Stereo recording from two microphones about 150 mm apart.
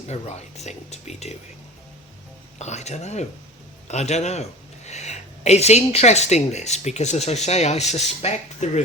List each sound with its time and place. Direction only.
0.1 s speech: 50° left (ahead or behind)
2.6 s speech: 50° left (ahead or behind)